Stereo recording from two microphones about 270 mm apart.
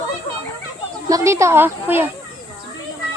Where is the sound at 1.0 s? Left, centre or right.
Centre.